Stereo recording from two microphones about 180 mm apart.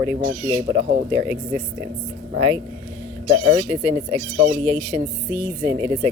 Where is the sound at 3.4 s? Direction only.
25° right (ahead or behind).